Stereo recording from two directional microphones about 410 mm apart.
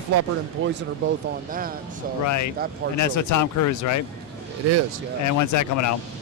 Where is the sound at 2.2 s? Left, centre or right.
Left.